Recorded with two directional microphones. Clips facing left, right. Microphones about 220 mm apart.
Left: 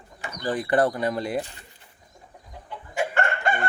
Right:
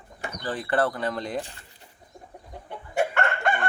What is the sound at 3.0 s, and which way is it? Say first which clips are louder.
Chicken: right 2 dB; 60° right (ahead or behind).